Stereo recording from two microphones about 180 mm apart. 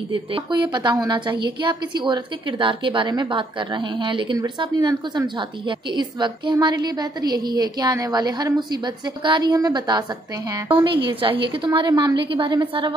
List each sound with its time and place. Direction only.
0.1 s a woman's voice: 25° right (ahead or behind)